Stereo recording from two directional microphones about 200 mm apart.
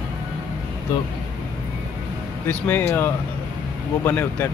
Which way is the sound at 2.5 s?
10° left (ahead or behind).